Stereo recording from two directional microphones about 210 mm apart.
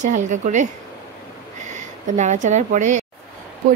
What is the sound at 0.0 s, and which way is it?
A woman's voice, 35° right (ahead or behind).